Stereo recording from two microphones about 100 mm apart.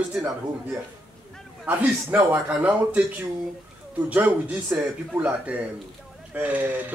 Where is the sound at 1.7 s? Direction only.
20° right (ahead or behind).